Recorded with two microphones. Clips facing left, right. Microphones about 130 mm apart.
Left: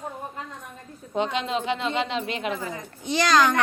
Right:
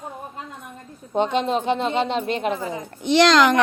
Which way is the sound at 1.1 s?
40° right (ahead or behind).